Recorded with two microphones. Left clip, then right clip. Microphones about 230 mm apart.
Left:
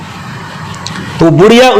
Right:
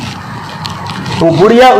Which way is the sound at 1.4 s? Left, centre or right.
Left.